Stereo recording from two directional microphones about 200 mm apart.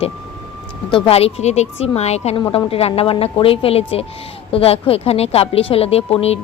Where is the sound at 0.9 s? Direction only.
30° left (ahead or behind).